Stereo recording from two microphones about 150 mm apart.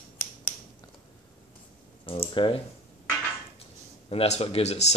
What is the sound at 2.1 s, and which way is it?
Speech, 35° left (ahead or behind).